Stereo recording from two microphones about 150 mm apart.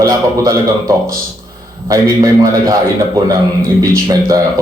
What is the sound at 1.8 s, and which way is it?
Speech, 25° right (ahead or behind).